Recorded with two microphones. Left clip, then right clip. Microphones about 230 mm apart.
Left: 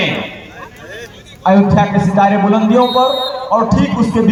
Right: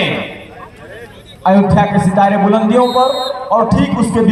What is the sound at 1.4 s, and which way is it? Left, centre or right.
A man's voice, right.